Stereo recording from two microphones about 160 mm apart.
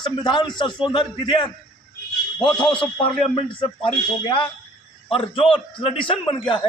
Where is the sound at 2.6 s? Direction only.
30° left (ahead or behind).